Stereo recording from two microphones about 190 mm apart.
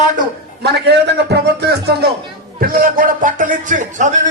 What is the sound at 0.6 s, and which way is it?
A man's voice, 60° right (ahead or behind).